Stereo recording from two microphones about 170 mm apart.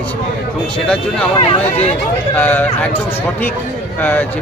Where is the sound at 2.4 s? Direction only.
10° left (ahead or behind).